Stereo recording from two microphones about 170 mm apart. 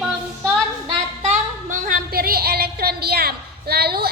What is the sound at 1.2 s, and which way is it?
A woman's voice, 45° right (ahead or behind).